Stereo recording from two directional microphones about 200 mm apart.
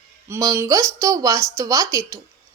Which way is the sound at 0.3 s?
15° right (ahead or behind).